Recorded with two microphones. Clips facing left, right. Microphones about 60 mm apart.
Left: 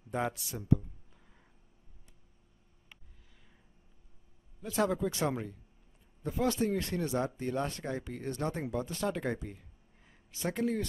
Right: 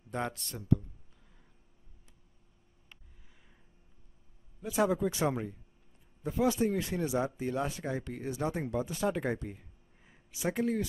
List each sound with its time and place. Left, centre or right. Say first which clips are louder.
0.1 s speech: left 2 dB; centre
4.6 s speech: right 2 dB; centre